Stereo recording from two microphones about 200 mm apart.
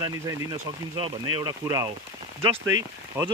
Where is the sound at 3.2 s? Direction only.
10° right (ahead or behind).